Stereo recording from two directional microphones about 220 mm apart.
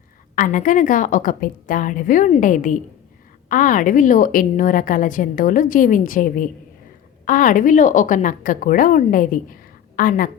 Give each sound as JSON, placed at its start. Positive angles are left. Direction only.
{"t": 0.3, "sound": "a woman's voice", "side_deg": 35}